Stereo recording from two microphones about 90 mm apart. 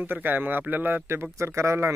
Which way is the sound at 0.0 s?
20° right (ahead or behind).